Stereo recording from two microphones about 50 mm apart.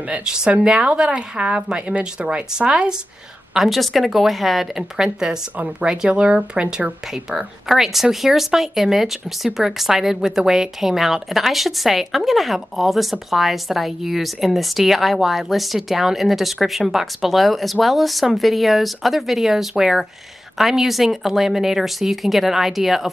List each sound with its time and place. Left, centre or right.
0.2 s speech: centre
3.5 s speech: centre
4.9 s speech: centre
5.6 s speech: right
7.2 s speech: centre